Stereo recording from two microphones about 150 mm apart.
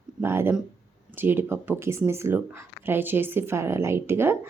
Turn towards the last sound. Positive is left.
turn(degrees=-15)  # may be behind; listen again after turning